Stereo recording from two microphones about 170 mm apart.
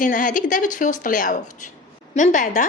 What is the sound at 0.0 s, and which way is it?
Speech, 50° left (ahead or behind).